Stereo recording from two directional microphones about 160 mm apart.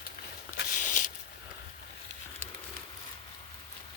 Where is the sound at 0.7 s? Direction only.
55° left (ahead or behind).